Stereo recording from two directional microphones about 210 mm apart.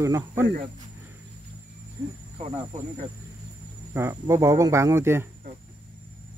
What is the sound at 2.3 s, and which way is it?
Speech, 30° right (ahead or behind).